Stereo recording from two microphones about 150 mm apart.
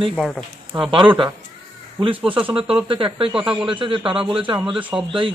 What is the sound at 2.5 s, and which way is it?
Speech, 40° right (ahead or behind).